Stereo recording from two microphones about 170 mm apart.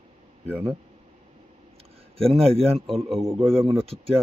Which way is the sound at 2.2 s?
35° right (ahead or behind).